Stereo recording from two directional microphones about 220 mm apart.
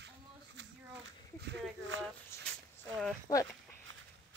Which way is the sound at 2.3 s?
15° left (ahead or behind).